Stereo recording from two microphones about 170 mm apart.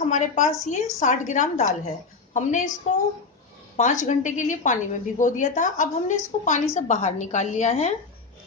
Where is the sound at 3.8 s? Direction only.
45° left (ahead or behind).